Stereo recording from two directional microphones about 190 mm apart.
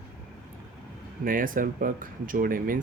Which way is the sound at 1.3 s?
45° right (ahead or behind).